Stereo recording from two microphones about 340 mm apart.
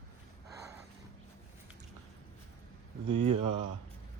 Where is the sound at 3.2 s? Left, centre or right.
Right.